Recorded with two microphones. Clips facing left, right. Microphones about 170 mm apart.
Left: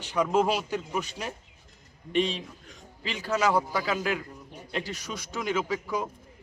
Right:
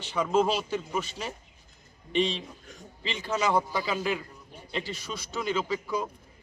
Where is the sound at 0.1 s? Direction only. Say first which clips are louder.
Left 1 dB; 10° left (ahead or behind).